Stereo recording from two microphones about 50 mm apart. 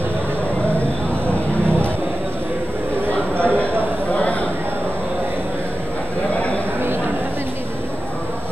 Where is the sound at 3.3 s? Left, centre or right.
Right.